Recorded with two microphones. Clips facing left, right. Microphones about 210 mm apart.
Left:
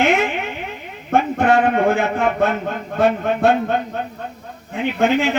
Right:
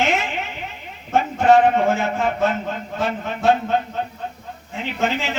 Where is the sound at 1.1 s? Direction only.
55° left (ahead or behind).